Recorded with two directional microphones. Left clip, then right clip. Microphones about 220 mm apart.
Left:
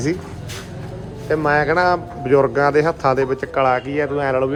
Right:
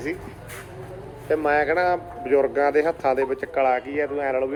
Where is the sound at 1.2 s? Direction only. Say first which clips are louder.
Left 4 dB; centre (ahead or behind).